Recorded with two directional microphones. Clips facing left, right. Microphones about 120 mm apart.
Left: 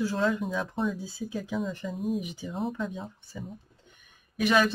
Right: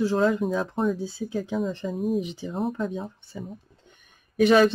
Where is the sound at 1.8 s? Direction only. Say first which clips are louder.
Right 5 dB; 45° right (ahead or behind).